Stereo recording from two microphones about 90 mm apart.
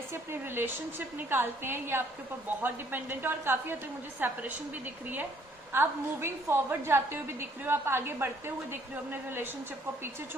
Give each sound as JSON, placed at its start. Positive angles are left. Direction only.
{"t": 0.1, "sound": "a woman's voice", "side_deg": -25}